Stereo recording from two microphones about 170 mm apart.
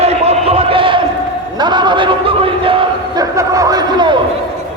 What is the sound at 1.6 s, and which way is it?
Speech, 25° right (ahead or behind).